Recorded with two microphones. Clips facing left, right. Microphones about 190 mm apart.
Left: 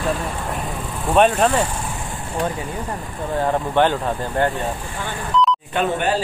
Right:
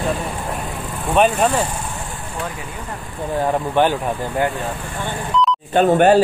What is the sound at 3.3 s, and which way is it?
Speech, 20° right (ahead or behind).